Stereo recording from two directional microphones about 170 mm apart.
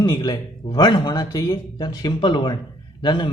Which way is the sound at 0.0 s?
25° left (ahead or behind).